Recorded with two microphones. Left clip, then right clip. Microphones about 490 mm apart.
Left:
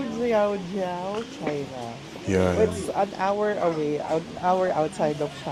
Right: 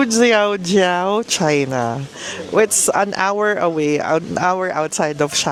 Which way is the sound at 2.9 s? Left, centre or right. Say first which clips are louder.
Right 7 dB; right.